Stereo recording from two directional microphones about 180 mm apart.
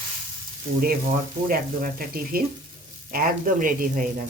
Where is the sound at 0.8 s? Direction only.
55° right (ahead or behind).